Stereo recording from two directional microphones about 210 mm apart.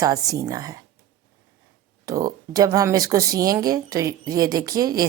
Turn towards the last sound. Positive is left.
turn(degrees=-15)  # may be behind; listen again after turning